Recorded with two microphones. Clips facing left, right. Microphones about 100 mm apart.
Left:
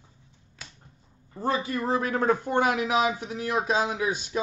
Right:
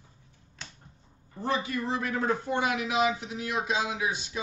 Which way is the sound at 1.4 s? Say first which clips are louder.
Left 3 dB; 40° left (ahead or behind).